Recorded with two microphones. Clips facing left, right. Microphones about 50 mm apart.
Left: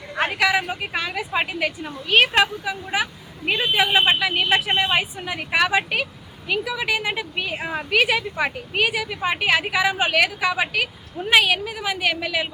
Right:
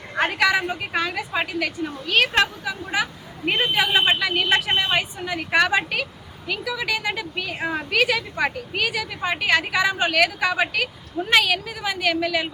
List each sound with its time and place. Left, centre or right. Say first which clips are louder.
0.3 s a woman's voice: left 1 dB; centre
1.4 s a woman's voice: even; left
6.5 s a woman's voice: left 2 dB; centre